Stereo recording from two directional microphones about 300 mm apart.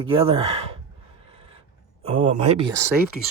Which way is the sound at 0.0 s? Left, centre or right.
Centre.